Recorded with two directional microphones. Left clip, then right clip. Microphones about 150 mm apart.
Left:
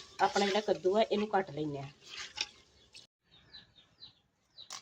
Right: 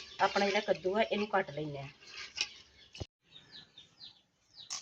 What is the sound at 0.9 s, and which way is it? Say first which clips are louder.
Speech: left 3 dB; 50° left (ahead or behind).